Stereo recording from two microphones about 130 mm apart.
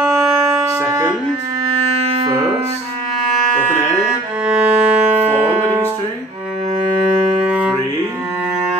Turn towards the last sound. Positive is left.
turn(degrees=-10)  # may be behind; listen again after turning